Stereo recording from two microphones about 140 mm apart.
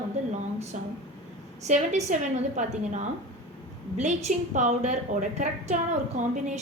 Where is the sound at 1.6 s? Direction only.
55° right (ahead or behind).